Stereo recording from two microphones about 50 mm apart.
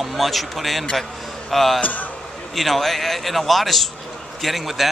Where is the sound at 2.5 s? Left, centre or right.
Centre.